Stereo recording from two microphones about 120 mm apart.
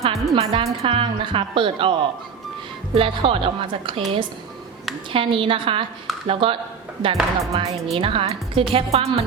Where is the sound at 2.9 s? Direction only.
50° right (ahead or behind).